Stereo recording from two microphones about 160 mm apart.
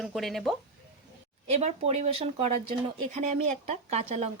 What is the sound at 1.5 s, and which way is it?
A woman's voice, 40° right (ahead or behind).